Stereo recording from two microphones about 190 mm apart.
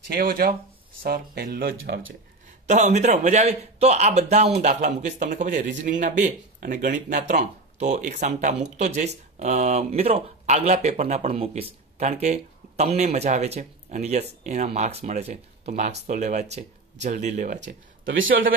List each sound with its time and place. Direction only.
0.1 s speech: 55° right (ahead or behind)
1.8 s speech: 90° right
2.6 s speech: 35° right (ahead or behind)
18.0 s speech: 85° right